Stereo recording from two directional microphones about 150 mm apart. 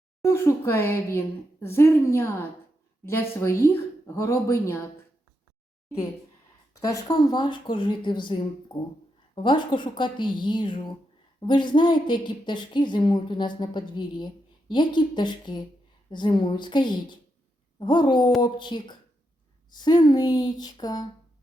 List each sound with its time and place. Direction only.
0.2 s speech: 20° left (ahead or behind)
6.7 s a woman's voice: 20° left (ahead or behind)